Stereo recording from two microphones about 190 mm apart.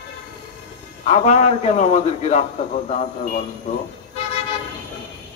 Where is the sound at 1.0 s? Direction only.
35° left (ahead or behind).